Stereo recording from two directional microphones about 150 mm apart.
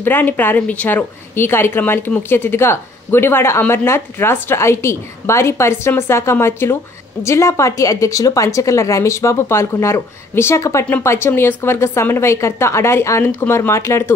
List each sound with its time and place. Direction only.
0.0 s a woman's voice: 15° left (ahead or behind)